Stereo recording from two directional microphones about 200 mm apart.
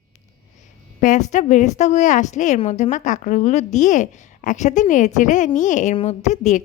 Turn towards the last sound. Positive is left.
turn(degrees=35)  # may be behind; listen again after turning